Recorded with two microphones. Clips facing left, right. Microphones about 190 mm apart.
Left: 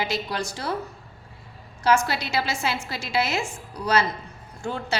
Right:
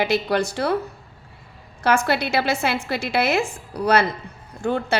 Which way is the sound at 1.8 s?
60° right (ahead or behind).